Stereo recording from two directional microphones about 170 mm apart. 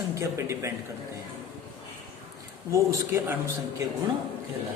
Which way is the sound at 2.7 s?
15° right (ahead or behind).